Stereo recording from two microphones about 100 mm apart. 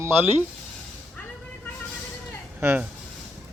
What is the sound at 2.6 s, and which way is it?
Speech, 20° right (ahead or behind).